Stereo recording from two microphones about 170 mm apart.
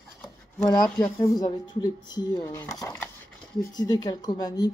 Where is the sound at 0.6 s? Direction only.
20° left (ahead or behind).